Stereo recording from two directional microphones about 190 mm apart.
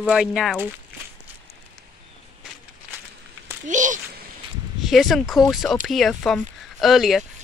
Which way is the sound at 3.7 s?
40° right (ahead or behind).